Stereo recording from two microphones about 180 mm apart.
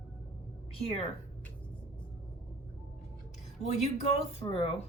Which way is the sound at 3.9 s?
35° left (ahead or behind).